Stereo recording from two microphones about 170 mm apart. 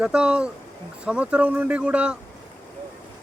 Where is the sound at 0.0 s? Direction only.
5° right (ahead or behind).